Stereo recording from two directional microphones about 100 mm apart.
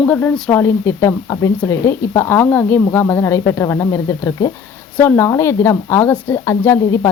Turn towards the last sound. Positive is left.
turn(degrees=25)  # may be behind; listen again after turning